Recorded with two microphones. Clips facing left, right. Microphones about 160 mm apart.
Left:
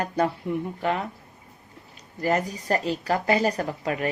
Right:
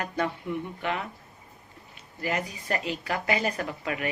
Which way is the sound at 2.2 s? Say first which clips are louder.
Left 6 dB; 45° left (ahead or behind).